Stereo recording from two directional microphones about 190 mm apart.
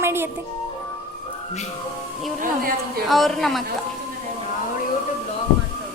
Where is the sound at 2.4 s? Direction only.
50° right (ahead or behind).